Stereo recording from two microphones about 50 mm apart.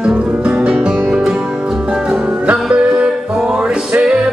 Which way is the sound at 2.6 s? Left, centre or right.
Right.